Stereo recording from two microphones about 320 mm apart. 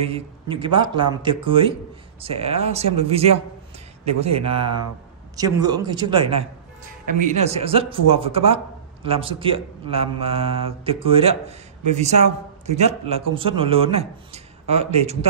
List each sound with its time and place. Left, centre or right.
0.0 s speech: centre
4.4 s a man's voice: centre